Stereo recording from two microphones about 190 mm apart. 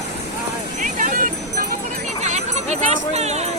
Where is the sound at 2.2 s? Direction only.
35° right (ahead or behind).